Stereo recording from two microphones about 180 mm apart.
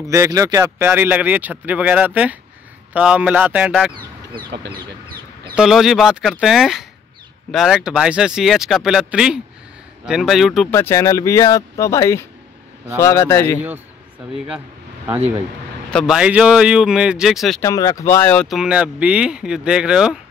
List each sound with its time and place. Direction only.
0.0 s speech: 15° right (ahead or behind)
5.6 s speech: centre (ahead or behind)
10.7 s speech: 15° left (ahead or behind)
15.9 s speech: centre (ahead or behind)
17.6 s speech: 20° left (ahead or behind); by 20.2 s 5° right (ahead or behind)